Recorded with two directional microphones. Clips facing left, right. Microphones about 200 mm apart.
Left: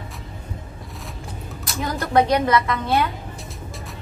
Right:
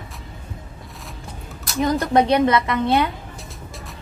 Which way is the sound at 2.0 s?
20° right (ahead or behind).